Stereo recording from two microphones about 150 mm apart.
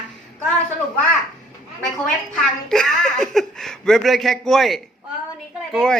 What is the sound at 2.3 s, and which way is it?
A woman's voice, 5° left (ahead or behind).